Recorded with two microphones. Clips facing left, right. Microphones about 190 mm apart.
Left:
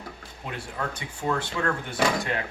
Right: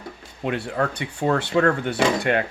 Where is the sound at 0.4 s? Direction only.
70° right (ahead or behind).